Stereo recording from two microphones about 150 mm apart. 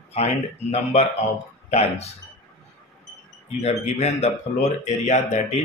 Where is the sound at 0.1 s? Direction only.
45° left (ahead or behind).